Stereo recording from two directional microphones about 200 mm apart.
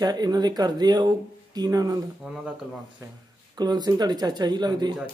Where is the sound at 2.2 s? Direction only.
5° right (ahead or behind).